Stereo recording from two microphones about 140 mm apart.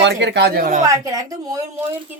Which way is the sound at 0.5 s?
65° right (ahead or behind).